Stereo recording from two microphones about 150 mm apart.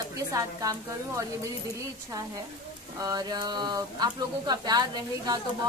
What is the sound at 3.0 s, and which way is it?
Speech, 25° right (ahead or behind).